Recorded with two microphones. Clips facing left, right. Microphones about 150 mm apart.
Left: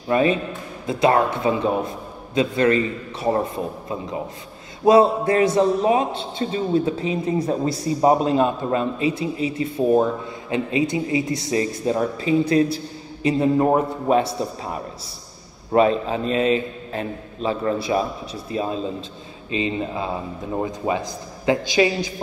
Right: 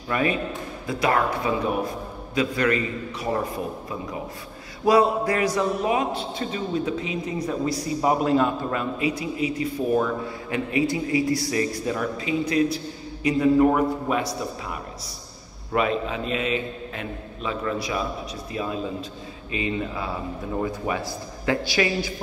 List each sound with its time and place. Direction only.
0.1 s a man's voice: 25° left (ahead or behind)